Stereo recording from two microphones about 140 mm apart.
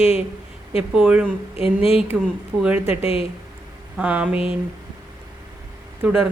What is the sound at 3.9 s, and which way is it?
Speech, 10° right (ahead or behind).